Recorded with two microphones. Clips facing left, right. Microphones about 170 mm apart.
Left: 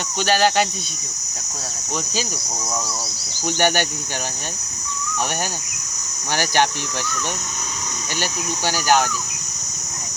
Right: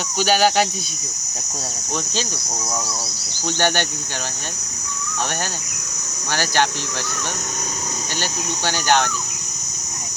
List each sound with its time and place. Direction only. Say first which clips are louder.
0.2 s speech: right 1 dB; centre (ahead or behind)
3.4 s speech: left 1 dB; 10° left (ahead or behind)
6.3 s speech: left 1 dB; 15° left (ahead or behind)
8.2 s speech: left 2 dB; 10° left (ahead or behind)